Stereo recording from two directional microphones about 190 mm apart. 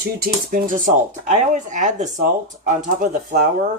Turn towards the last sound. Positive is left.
turn(degrees=-40)  # may be behind; listen again after turning